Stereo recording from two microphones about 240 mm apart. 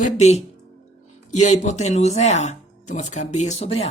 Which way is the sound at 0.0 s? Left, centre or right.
Left.